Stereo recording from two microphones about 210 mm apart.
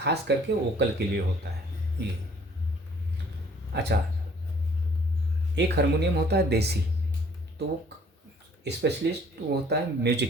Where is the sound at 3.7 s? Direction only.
55° right (ahead or behind).